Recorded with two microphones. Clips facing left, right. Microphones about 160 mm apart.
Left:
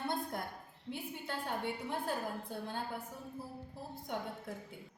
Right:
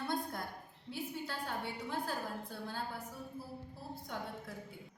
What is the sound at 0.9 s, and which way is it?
A woman's voice, 20° left (ahead or behind).